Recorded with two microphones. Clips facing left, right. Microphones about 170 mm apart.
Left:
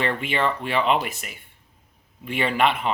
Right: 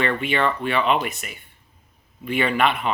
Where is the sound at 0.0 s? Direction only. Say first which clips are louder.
Right 2 dB; 25° left (ahead or behind).